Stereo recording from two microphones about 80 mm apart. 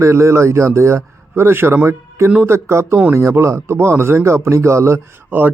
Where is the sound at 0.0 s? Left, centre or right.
Right.